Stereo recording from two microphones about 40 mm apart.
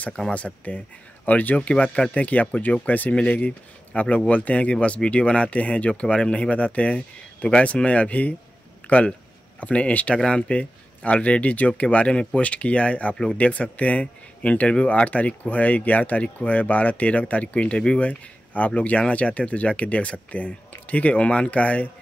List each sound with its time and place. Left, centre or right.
0.3 s speech: left
1.7 s speech: left
6.5 s speech: left